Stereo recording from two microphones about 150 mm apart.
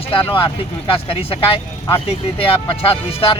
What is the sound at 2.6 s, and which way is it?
Speech, 40° left (ahead or behind).